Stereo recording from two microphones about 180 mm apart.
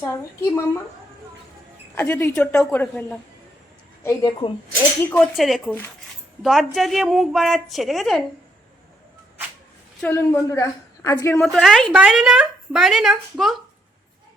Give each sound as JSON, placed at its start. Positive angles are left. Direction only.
{"t": 0.0, "sound": "a woman's voice", "side_deg": 15}
{"t": 2.0, "sound": "a woman's voice", "side_deg": 10}
{"t": 4.0, "sound": "a woman's voice", "side_deg": 20}
{"t": 5.0, "sound": "a woman's voice", "side_deg": 5}
{"t": 10.0, "sound": "a woman's voice", "side_deg": 10}
{"t": 11.3, "sound": "a woman's voice", "side_deg": 0}